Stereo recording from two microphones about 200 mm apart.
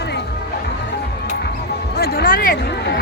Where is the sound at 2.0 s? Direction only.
50° left (ahead or behind).